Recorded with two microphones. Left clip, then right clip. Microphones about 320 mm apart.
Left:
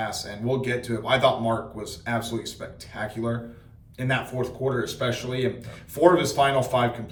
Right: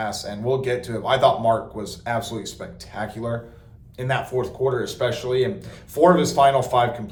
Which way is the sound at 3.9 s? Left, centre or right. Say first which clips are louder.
Right 3 dB; centre.